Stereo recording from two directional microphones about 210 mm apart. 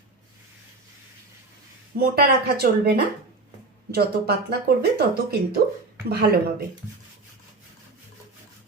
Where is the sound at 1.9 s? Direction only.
45° right (ahead or behind).